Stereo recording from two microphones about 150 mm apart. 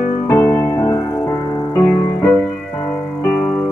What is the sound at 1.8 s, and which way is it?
Music, 5° left (ahead or behind).